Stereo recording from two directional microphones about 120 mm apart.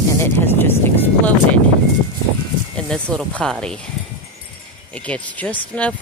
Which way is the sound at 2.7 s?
5° left (ahead or behind).